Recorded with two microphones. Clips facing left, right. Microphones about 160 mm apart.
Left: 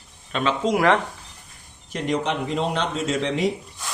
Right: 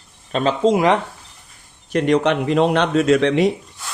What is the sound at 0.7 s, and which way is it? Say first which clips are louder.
Speech: right 3 dB; 20° right (ahead or behind).